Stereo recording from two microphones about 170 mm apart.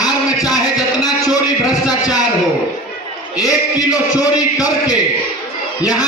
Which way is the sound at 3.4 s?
20° left (ahead or behind).